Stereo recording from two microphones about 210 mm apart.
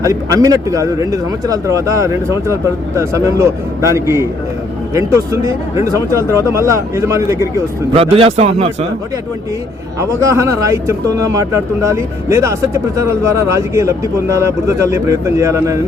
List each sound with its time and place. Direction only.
0.0 s a man's voice: 15° right (ahead or behind)
7.9 s a man's voice: 25° right (ahead or behind)
10.0 s a man's voice: 15° right (ahead or behind)